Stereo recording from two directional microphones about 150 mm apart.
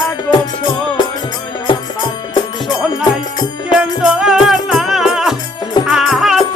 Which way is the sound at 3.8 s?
5° right (ahead or behind).